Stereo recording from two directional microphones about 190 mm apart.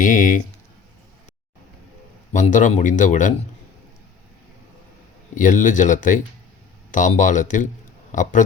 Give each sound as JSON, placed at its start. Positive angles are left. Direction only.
{"t": 0.0, "sound": "speech", "side_deg": 45}
{"t": 2.3, "sound": "speech", "side_deg": 40}
{"t": 5.4, "sound": "speech", "side_deg": 45}